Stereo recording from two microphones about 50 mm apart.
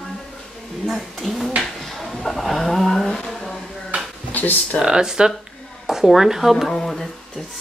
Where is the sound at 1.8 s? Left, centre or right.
Centre.